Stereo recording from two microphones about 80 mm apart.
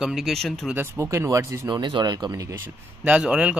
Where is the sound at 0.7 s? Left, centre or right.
Right.